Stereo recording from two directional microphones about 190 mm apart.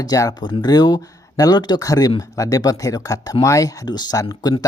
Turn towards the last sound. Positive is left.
turn(degrees=20)  # may be behind; listen again after turning